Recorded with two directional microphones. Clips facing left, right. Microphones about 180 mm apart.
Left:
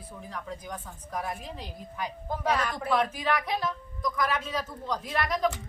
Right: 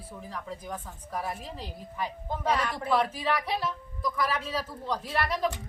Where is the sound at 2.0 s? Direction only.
30° right (ahead or behind).